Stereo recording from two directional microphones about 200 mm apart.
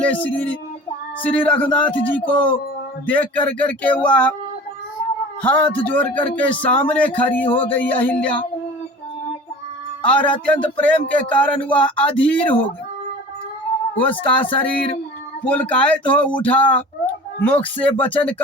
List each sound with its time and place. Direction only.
0.0 s speech: 5° left (ahead or behind)
5.4 s speech: 5° left (ahead or behind)
7.4 s speech: 25° left (ahead or behind)
7.7 s speech: 10° left (ahead or behind)
10.0 s speech: 5° left (ahead or behind)
13.9 s speech: 10° left (ahead or behind)
15.4 s speech: 10° left (ahead or behind)